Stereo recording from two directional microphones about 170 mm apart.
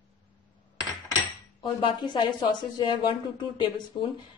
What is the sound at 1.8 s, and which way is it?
A woman's voice, 25° left (ahead or behind).